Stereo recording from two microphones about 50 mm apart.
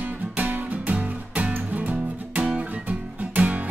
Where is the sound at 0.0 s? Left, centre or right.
Right.